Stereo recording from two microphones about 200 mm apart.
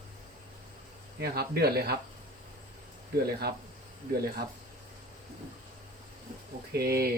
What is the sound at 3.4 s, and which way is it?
Speech, 55° right (ahead or behind).